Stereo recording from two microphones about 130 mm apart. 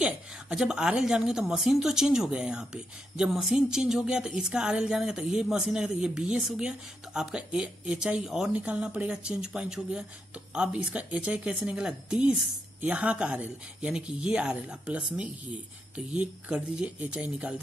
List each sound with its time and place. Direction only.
0.0 s a woman's voice: 5° right (ahead or behind)